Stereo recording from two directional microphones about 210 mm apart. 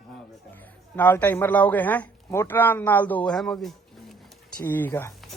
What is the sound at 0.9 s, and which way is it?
A man's voice, 10° left (ahead or behind).